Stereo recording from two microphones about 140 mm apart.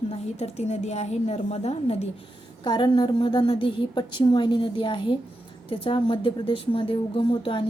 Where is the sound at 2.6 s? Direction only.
35° left (ahead or behind).